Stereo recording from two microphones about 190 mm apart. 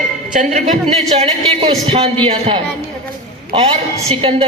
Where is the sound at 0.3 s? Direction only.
40° right (ahead or behind).